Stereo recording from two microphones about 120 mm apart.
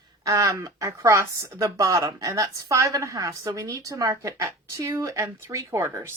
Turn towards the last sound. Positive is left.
turn(degrees=-25)  # may be behind; listen again after turning